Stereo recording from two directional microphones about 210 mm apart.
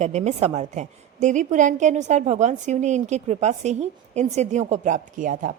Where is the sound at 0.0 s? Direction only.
30° right (ahead or behind).